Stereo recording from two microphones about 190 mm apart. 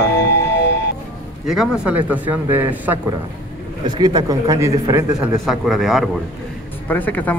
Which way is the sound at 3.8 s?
20° right (ahead or behind).